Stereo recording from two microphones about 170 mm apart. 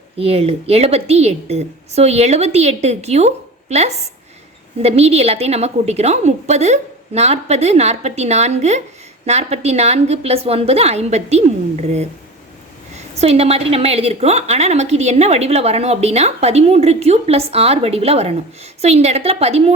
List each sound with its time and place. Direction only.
0.2 s a woman's voice: 35° right (ahead or behind)
13.1 s a woman's voice: 35° right (ahead or behind)